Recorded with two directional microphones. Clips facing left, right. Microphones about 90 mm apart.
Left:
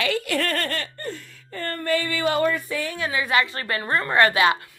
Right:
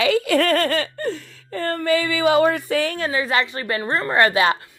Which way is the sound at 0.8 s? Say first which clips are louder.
Right 7 dB; 90° right.